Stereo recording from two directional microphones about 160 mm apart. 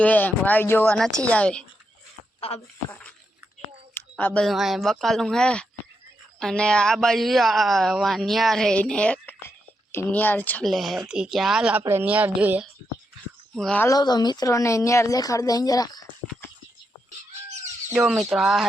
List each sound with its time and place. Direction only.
0.0 s a woman's voice: 10° left (ahead or behind)
2.5 s speech: 35° left (ahead or behind)
2.9 s a woman's voice: 10° left (ahead or behind)
11.8 s a woman's voice: 15° right (ahead or behind)
13.6 s speech: 5° left (ahead or behind)
13.8 s speech: 25° left (ahead or behind)
17.9 s speech: centre (ahead or behind)